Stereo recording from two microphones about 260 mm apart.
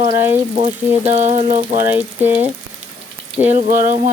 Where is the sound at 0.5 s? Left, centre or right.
Right.